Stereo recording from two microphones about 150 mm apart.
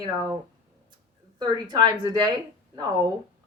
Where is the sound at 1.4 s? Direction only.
30° right (ahead or behind).